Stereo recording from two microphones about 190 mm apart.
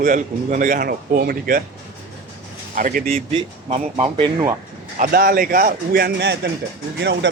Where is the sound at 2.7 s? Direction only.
50° right (ahead or behind).